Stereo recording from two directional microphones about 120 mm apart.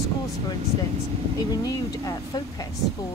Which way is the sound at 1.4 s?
30° left (ahead or behind).